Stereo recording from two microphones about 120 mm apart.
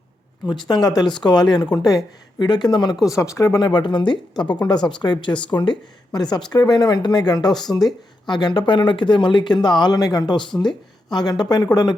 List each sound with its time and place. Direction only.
0.4 s speech: 35° left (ahead or behind)